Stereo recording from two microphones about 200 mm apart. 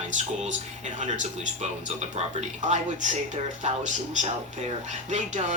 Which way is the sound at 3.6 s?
35° right (ahead or behind).